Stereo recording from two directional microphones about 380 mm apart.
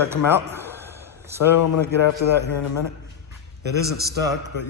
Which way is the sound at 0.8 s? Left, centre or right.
Centre.